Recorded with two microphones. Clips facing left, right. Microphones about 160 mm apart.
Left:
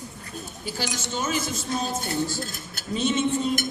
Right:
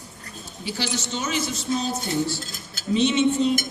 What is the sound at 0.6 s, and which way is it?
A man's voice, 45° left (ahead or behind).